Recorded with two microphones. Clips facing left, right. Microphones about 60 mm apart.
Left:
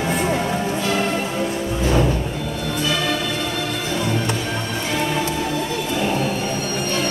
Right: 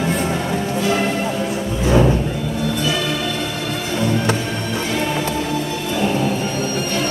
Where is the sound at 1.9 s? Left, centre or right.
Centre.